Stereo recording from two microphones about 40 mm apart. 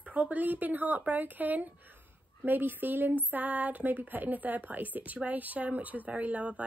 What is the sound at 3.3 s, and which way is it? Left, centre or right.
A woman's voice, right.